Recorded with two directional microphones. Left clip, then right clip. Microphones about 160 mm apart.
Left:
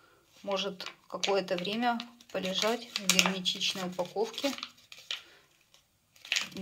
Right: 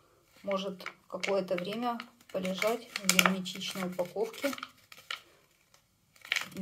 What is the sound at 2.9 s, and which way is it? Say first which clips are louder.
Speech: right 1 dB; 20° right (ahead or behind).